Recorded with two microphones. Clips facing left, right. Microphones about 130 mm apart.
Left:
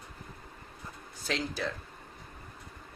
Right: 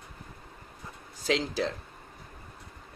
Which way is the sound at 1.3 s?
90° right.